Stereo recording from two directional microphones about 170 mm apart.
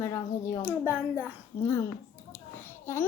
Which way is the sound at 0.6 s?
10° right (ahead or behind).